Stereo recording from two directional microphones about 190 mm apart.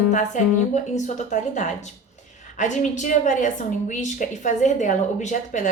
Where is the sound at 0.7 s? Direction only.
40° left (ahead or behind).